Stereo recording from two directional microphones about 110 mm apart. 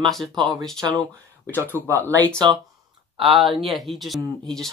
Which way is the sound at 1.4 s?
20° right (ahead or behind).